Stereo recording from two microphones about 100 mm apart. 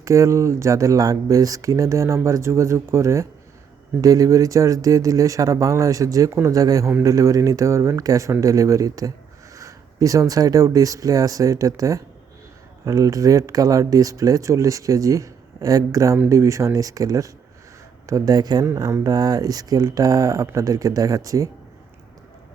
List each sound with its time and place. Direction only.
0.0 s speech: 30° right (ahead or behind)
18.6 s speech: 30° right (ahead or behind)